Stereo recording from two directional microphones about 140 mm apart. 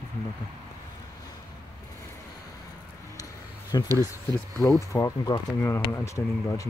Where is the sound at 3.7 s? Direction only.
30° left (ahead or behind).